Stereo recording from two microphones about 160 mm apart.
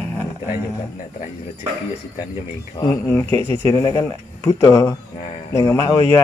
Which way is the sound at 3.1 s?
15° left (ahead or behind).